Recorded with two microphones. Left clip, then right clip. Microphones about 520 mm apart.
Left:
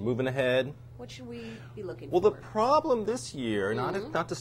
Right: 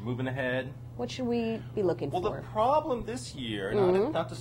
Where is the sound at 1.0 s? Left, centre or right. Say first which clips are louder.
Right 11 dB; right.